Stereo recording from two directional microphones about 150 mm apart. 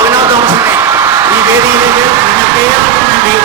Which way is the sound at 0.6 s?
15° right (ahead or behind).